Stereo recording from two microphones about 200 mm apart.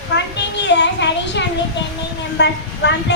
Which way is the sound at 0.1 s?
60° left (ahead or behind).